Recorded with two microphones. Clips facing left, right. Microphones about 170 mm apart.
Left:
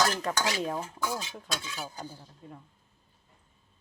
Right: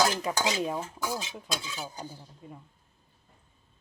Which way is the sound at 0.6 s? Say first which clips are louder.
Right 1 dB; 5° right (ahead or behind).